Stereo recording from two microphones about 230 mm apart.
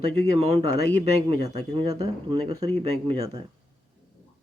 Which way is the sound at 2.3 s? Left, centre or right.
Centre.